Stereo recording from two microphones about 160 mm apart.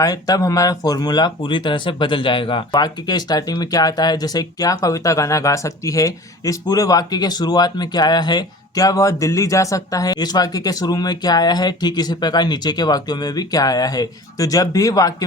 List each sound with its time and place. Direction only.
0.0 s speech: 20° left (ahead or behind)